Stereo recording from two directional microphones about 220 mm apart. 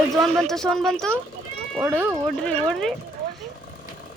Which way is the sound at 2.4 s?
5° left (ahead or behind).